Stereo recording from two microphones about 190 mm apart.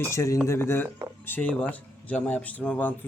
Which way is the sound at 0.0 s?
15° left (ahead or behind).